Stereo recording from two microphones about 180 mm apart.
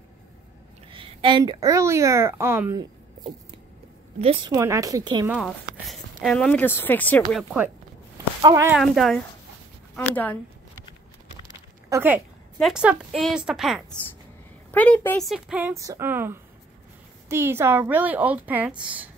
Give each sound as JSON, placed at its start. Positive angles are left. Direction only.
{"t": 0.9, "sound": "speech", "side_deg": -25}
{"t": 5.3, "sound": "speech", "side_deg": 0}
{"t": 7.2, "sound": "a woman's voice", "side_deg": -5}
{"t": 8.4, "sound": "speech", "side_deg": -25}
{"t": 8.7, "sound": "a woman's voice", "side_deg": 0}
{"t": 11.9, "sound": "a woman's voice", "side_deg": -10}
{"t": 14.7, "sound": "speech", "side_deg": 10}